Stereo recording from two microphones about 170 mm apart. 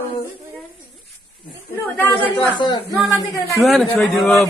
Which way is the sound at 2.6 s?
25° left (ahead or behind).